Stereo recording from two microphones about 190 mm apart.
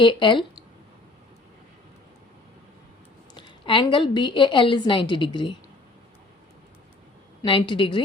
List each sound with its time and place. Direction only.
0.0 s a woman's voice: 25° left (ahead or behind)
3.3 s a woman's voice: 25° left (ahead or behind)
7.4 s a woman's voice: 25° left (ahead or behind)